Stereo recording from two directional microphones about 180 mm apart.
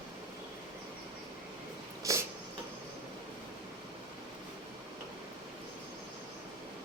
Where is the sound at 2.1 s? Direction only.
15° right (ahead or behind).